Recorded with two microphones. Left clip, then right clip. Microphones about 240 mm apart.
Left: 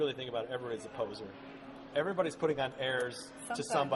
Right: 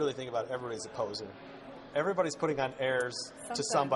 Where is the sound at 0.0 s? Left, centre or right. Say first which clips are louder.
Right 2 dB; right.